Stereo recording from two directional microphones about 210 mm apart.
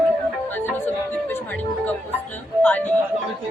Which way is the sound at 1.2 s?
10° left (ahead or behind).